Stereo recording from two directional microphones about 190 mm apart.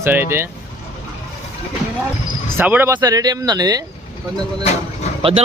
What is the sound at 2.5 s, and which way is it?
Speech, 10° right (ahead or behind).